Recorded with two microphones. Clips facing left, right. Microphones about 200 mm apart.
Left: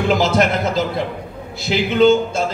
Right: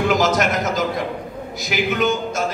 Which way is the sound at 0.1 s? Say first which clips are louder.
Left 2 dB; 30° left (ahead or behind).